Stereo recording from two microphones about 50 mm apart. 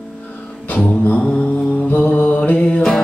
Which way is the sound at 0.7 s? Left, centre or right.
Left.